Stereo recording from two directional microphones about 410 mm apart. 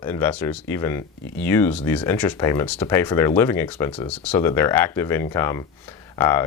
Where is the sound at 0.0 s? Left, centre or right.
Centre.